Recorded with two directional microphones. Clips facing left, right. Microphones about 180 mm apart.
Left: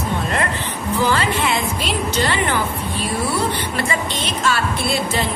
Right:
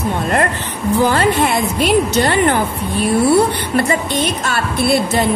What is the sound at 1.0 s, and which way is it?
A woman's voice, 50° right (ahead or behind).